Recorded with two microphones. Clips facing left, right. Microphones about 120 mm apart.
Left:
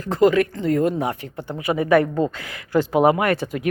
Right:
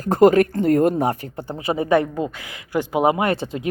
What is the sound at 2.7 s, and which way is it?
Speech, 15° right (ahead or behind).